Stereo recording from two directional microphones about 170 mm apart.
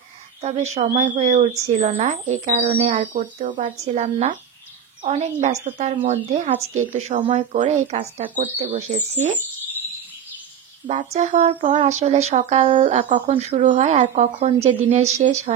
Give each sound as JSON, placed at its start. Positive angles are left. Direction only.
{"t": 0.4, "sound": "a woman's voice", "side_deg": -40}
{"t": 11.1, "sound": "a woman's voice", "side_deg": -45}